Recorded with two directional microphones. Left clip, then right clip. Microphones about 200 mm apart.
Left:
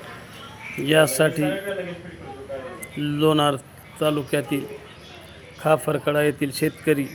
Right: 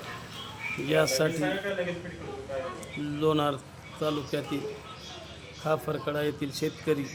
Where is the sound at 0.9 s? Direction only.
20° left (ahead or behind).